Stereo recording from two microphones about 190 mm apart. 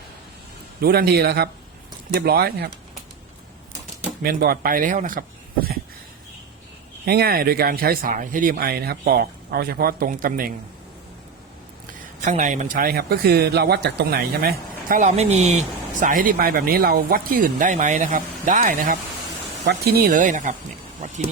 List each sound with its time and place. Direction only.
0.8 s a man's voice: 55° right (ahead or behind)
4.2 s speech: 50° right (ahead or behind)
7.0 s speech: 55° right (ahead or behind)
12.2 s speech: 40° right (ahead or behind)